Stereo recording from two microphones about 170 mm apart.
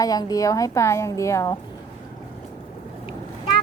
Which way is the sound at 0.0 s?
20° left (ahead or behind).